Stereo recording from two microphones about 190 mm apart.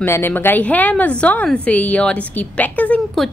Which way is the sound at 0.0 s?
10° left (ahead or behind).